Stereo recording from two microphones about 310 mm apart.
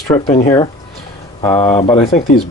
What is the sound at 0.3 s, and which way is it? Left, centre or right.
Speech, centre.